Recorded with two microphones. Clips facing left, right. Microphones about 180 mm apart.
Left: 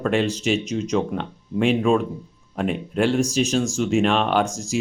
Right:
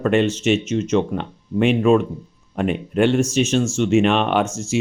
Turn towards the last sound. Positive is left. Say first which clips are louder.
# right 2 dB
turn(degrees=35)  # may be behind; listen again after turning